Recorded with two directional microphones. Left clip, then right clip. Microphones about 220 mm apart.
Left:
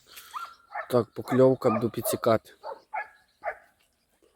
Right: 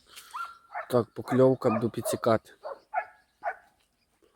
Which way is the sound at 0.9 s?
Centre (ahead or behind).